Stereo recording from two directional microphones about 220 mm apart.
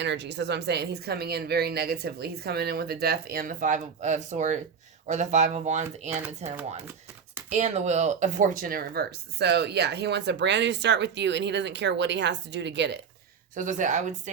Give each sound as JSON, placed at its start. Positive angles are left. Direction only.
{"t": 0.0, "sound": "speech", "side_deg": -55}
{"t": 7.5, "sound": "speech", "side_deg": -30}
{"t": 13.5, "sound": "speech", "side_deg": -35}